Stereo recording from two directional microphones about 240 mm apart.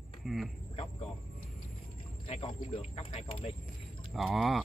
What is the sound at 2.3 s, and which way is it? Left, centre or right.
Speech, left.